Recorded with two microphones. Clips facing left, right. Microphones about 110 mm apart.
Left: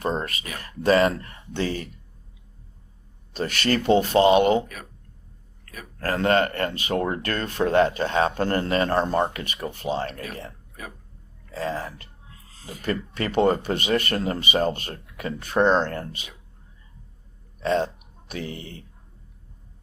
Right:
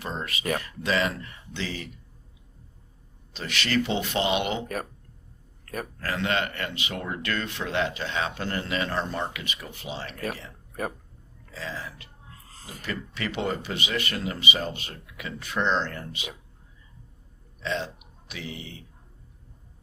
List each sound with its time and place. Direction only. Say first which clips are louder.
0.0 s speech: left 5 dB; 40° left (ahead or behind)
3.3 s speech: left 3 dB; 45° left (ahead or behind)
5.6 s speech: right 8 dB; 45° right (ahead or behind)
6.0 s speech: left 7 dB; 45° left (ahead or behind)
11.5 s speech: left 8 dB; 50° left (ahead or behind)
17.6 s speech: left 8 dB; 50° left (ahead or behind)